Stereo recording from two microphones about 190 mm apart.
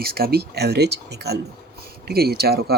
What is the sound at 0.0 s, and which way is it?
Speech, 55° right (ahead or behind).